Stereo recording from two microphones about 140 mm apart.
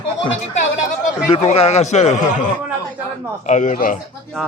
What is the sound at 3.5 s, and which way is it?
Speech, 65° left (ahead or behind).